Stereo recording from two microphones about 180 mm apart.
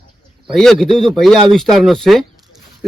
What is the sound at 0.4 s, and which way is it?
Speech, centre (ahead or behind).